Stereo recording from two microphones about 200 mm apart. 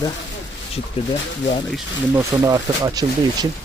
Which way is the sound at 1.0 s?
25° left (ahead or behind).